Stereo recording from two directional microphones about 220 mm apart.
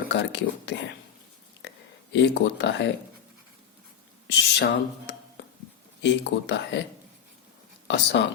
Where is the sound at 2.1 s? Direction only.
55° left (ahead or behind).